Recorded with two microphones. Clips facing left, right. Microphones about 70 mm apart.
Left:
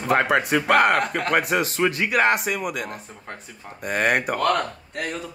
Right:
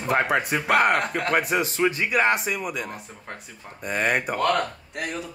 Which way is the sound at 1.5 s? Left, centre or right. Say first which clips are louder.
Left 1 dB; left.